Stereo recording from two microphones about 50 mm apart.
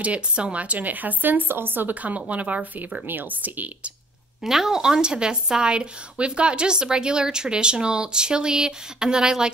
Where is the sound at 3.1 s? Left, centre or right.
Right.